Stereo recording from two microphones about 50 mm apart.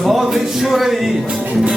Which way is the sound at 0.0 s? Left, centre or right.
Centre.